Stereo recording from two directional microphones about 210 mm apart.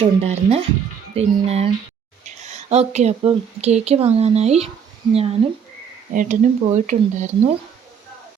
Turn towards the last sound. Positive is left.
turn(degrees=-35)  # may be behind; listen again after turning